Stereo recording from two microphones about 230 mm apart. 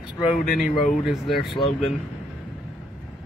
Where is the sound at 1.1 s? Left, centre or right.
Centre.